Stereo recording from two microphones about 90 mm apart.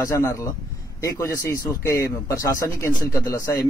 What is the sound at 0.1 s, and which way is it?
Speech, 30° left (ahead or behind).